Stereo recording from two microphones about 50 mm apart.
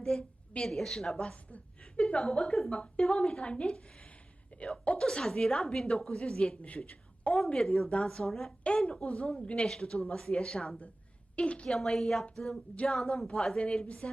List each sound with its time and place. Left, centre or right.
0.0 s a sound: centre
0.6 s speech: centre
1.5 s a sound: left
2.6 s a woman's voice: left
6.7 s a sound: left
7.6 s speech: centre
8.6 s a woman's voice: left
11.3 s a woman's voice: left
11.7 s speech: centre; by 14.1 s left